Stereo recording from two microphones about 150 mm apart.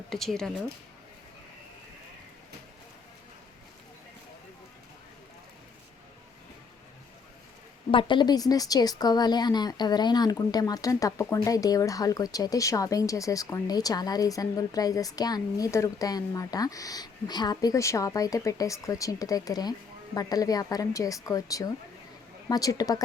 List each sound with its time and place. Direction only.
0.1 s speech: centre (ahead or behind)
7.9 s speech: 35° left (ahead or behind)